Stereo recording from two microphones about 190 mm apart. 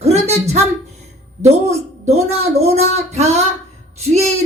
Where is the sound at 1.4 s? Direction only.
35° right (ahead or behind).